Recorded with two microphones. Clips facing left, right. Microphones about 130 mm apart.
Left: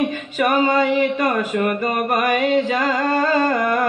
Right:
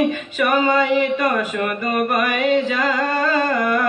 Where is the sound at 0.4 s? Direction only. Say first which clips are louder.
Left 1 dB; 35° left (ahead or behind).